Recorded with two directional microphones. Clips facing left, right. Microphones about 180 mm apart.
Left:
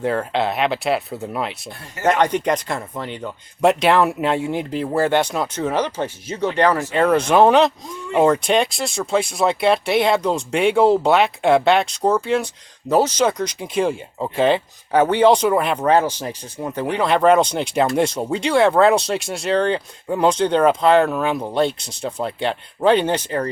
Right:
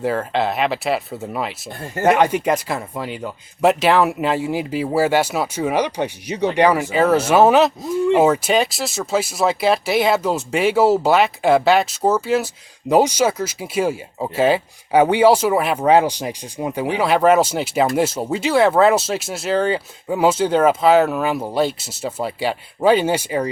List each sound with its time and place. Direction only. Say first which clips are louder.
0.0 s speech: even; centre (ahead or behind)